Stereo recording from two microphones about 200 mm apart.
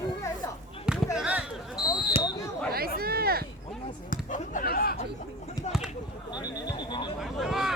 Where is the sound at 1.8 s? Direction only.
20° left (ahead or behind).